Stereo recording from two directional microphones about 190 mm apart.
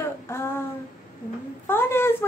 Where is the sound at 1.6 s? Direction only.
10° left (ahead or behind).